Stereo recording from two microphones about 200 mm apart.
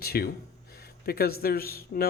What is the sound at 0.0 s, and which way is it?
Speech, 50° left (ahead or behind).